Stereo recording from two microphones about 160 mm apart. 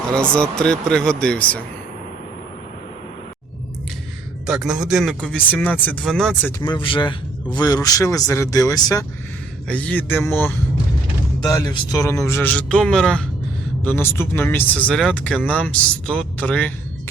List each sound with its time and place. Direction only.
0.2 s speech: 5° left (ahead or behind)
4.4 s speech: 5° right (ahead or behind)
6.6 s speech: 30° left (ahead or behind)
9.6 s a man's voice: 10° left (ahead or behind)